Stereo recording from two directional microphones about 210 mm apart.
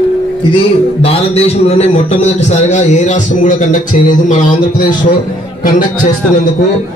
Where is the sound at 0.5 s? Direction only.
25° left (ahead or behind).